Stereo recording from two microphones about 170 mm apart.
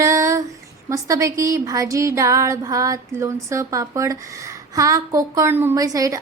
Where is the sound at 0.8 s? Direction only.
20° right (ahead or behind).